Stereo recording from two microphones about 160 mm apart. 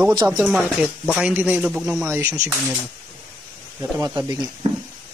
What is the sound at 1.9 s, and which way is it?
Speech, 15° right (ahead or behind).